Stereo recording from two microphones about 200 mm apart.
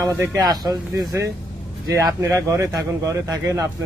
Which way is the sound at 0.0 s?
15° right (ahead or behind).